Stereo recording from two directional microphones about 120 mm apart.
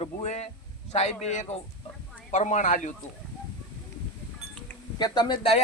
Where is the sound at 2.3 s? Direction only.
90° left.